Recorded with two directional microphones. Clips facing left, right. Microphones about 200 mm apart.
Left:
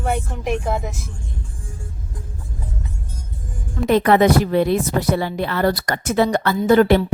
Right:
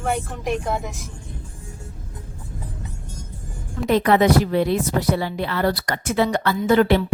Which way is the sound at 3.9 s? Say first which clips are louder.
Left 2 dB; 55° left (ahead or behind).